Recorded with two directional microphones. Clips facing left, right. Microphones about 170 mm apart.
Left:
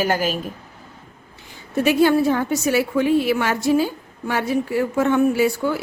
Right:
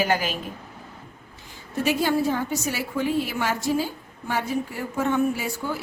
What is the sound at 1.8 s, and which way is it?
A woman's voice, 65° left (ahead or behind).